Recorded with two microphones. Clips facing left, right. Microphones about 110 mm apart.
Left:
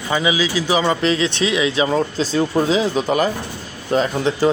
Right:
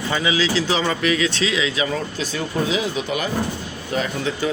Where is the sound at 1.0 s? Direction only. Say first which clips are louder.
Left 2 dB; 25° left (ahead or behind).